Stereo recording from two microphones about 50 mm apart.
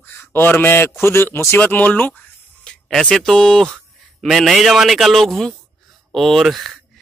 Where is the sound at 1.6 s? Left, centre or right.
Left.